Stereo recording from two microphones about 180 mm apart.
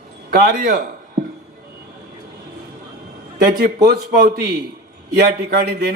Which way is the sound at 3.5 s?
55° right (ahead or behind).